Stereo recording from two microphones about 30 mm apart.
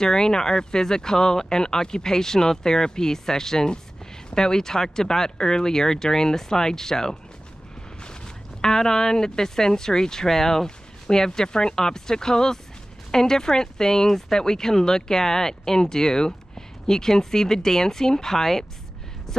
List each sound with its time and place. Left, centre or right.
0.0 s speech: left